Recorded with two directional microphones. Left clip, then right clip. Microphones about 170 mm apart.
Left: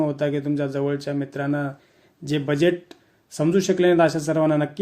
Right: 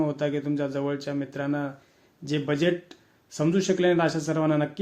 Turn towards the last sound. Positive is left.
turn(degrees=45)  # may be behind; listen again after turning